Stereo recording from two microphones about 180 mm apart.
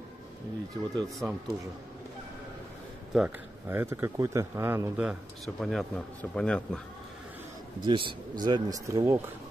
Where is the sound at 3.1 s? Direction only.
10° right (ahead or behind).